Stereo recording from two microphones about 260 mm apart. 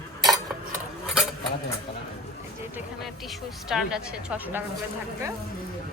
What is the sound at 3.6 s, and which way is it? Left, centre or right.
Speech, centre.